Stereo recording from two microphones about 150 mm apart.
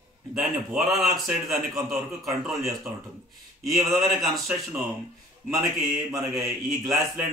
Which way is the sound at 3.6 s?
Centre (ahead or behind).